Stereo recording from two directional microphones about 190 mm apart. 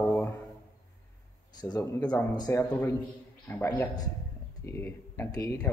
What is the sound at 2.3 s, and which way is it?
Speech, 20° left (ahead or behind).